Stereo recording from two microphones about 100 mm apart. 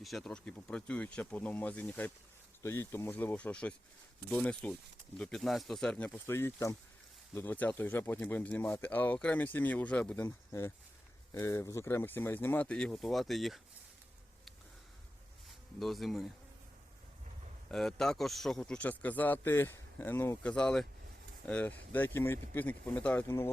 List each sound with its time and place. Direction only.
0.0 s speech: centre (ahead or behind)
6.1 s speech: 25° left (ahead or behind)
10.5 s speech: 30° left (ahead or behind); by 13.6 s centre (ahead or behind)
15.8 s speech: centre (ahead or behind)
17.7 s speech: 5° left (ahead or behind); by 20.4 s 25° left (ahead or behind)
20.4 s speech: 10° left (ahead or behind)